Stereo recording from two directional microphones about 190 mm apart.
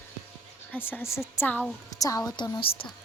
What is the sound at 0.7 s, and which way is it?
A woman's voice, 10° left (ahead or behind).